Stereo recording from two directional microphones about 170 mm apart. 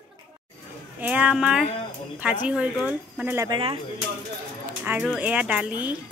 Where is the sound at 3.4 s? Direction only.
30° right (ahead or behind).